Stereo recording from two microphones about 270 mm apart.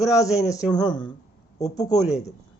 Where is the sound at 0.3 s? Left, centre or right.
Centre.